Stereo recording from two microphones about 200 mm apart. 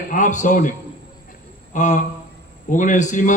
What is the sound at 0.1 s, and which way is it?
A man's voice, 40° left (ahead or behind).